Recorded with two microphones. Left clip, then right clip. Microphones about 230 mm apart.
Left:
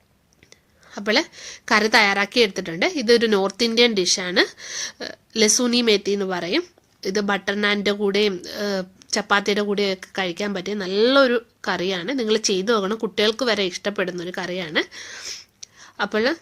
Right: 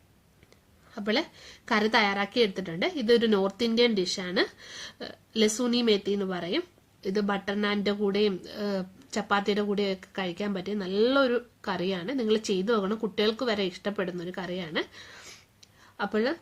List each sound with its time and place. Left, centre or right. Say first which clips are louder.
0.9 s a woman's voice: left 8 dB; left